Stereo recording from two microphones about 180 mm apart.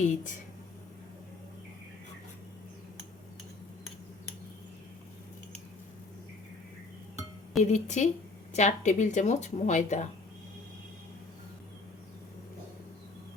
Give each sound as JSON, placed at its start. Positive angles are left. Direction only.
{"t": 0.0, "sound": "speech", "side_deg": 45}
{"t": 7.6, "sound": "a woman's voice", "side_deg": 40}